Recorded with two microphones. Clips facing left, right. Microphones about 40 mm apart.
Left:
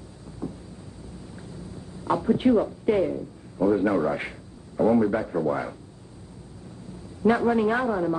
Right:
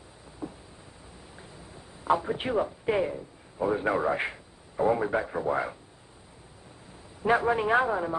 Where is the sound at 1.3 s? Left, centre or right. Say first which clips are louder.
Left 6 dB; centre.